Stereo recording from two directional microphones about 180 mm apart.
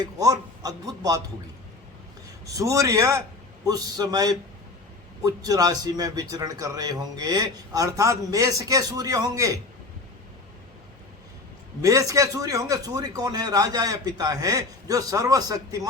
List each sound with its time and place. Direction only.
0.0 s a man's voice: 20° right (ahead or behind)
2.5 s a man's voice: 20° right (ahead or behind)
11.8 s a man's voice: 20° right (ahead or behind)